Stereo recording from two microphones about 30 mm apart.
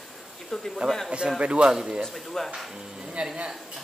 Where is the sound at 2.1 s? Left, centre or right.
Centre.